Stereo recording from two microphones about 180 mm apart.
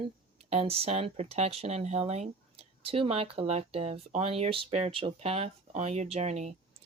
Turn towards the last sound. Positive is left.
turn(degrees=-40)  # may be behind; listen again after turning